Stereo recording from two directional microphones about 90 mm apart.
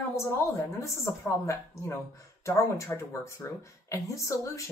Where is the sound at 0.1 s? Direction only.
30° left (ahead or behind).